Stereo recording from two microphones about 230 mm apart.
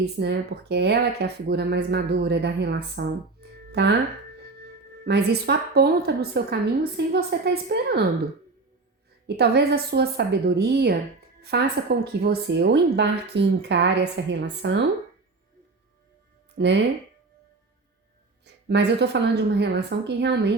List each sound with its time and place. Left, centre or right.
0.0 s a woman's voice: right
5.0 s a woman's voice: right
9.2 s a woman's voice: right
16.6 s a woman's voice: right
18.4 s a woman's voice: right